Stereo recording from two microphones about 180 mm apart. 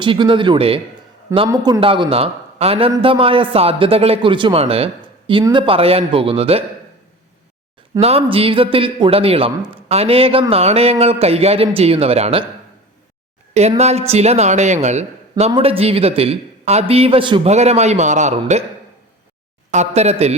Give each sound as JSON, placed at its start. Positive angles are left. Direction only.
{"t": 0.0, "sound": "speech", "side_deg": -25}
{"t": 8.0, "sound": "speech", "side_deg": -35}
{"t": 13.5, "sound": "speech", "side_deg": -35}
{"t": 19.7, "sound": "speech", "side_deg": -40}